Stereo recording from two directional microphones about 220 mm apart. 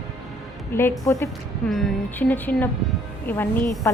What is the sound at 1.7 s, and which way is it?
A woman's voice, centre (ahead or behind).